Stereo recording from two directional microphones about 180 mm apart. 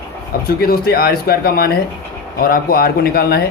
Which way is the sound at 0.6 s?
60° left (ahead or behind).